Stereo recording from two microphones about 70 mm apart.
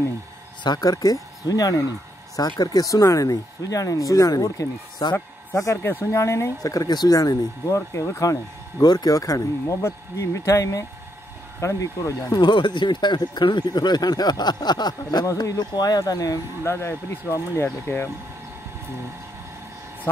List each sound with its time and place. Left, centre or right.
0.7 s speech: left
5.6 s speech: left
6.6 s speech: left
7.2 s speech: left
8.8 s speech: left
12.3 s speech: left
15.2 s speech: left
16.6 s speech: left